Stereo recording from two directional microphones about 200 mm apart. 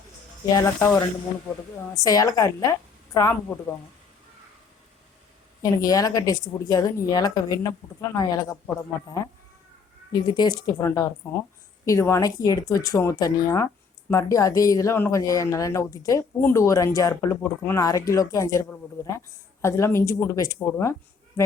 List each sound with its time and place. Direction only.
0.5 s speech: 15° left (ahead or behind)
5.7 s speech: 20° left (ahead or behind)